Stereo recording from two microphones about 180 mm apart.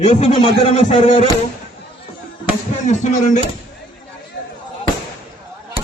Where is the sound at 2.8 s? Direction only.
40° left (ahead or behind).